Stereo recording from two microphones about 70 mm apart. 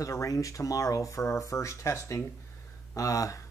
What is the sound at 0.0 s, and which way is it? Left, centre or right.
Speech, left.